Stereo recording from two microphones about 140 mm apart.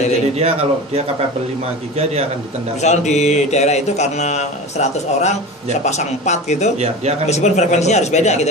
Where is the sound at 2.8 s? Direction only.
55° left (ahead or behind).